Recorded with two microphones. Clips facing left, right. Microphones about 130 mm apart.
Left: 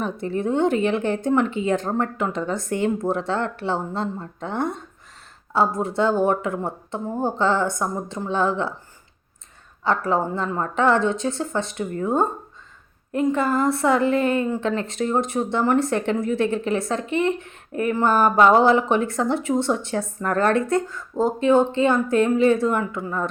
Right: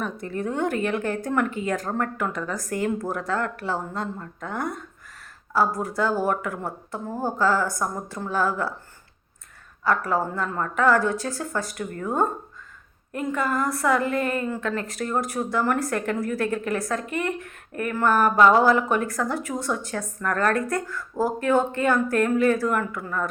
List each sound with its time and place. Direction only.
0.0 s speech: 30° left (ahead or behind)
9.8 s speech: 25° left (ahead or behind)